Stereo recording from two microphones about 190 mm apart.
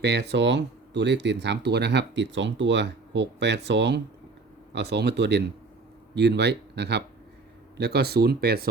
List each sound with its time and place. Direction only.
0.0 s speech: 60° right (ahead or behind)